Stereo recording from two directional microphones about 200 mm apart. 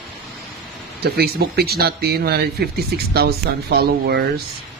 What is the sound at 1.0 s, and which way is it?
Speech, 50° right (ahead or behind).